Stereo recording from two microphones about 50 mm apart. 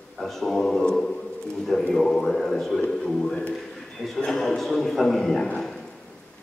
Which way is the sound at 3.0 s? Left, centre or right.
Centre.